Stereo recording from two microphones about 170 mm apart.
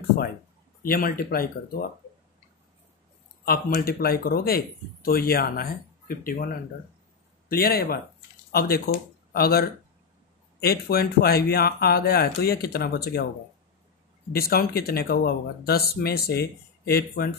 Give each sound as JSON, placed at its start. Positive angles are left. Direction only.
{"t": 0.8, "sound": "speech", "side_deg": 55}
{"t": 3.4, "sound": "speech", "side_deg": 60}
{"t": 7.4, "sound": "speech", "side_deg": 65}
{"t": 14.3, "sound": "speech", "side_deg": 60}